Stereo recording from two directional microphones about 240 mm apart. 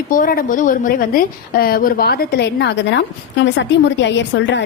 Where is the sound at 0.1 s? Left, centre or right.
Left.